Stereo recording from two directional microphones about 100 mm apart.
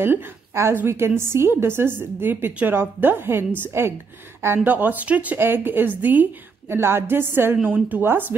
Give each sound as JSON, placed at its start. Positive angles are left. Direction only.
{"t": 0.0, "sound": "a woman's voice", "side_deg": -20}